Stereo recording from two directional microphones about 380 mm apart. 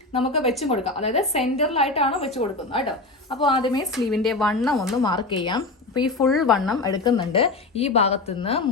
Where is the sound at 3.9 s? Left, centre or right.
Centre.